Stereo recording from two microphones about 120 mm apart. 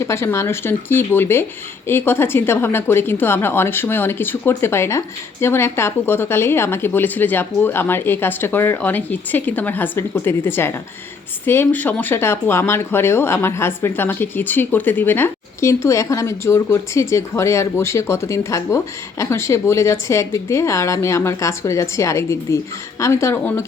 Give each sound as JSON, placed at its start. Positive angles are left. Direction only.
{"t": 0.0, "sound": "a woman's voice", "side_deg": 25}